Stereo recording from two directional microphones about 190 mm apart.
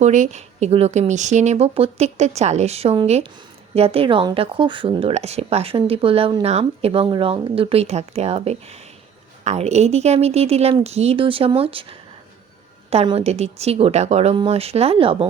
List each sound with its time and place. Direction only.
0.0 s speech: 40° right (ahead or behind)